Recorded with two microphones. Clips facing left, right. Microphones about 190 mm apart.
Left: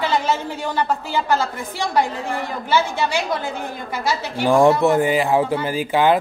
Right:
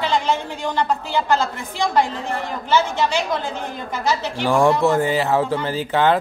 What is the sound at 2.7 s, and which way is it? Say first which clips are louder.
Speech: right 1 dB; 10° left (ahead or behind).